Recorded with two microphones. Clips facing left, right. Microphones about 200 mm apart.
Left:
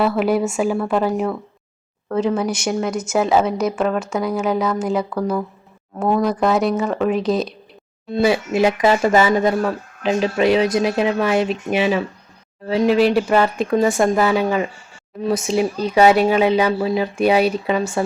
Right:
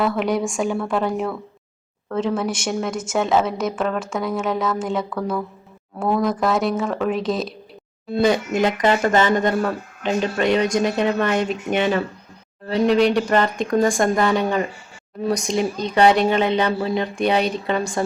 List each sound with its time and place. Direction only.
0.0 s speech: 5° left (ahead or behind)
8.6 s speech: 10° left (ahead or behind)